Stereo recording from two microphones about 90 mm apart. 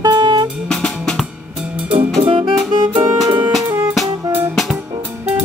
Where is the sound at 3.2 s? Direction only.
50° right (ahead or behind).